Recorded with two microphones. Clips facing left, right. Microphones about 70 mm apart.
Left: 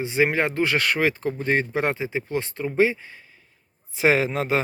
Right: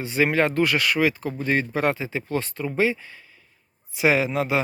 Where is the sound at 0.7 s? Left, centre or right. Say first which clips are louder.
Even; left.